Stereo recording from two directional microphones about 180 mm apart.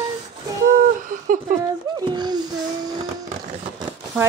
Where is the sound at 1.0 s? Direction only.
50° right (ahead or behind).